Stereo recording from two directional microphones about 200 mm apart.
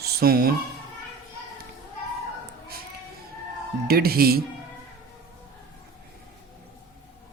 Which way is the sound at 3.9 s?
50° right (ahead or behind).